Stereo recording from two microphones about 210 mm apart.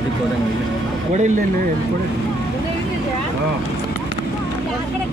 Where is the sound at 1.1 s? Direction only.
35° right (ahead or behind).